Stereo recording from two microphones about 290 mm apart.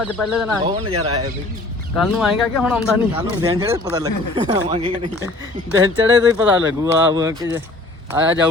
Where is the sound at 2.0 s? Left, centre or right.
Centre.